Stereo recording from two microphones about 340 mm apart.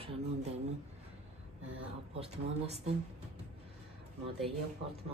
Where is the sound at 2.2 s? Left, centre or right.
Centre.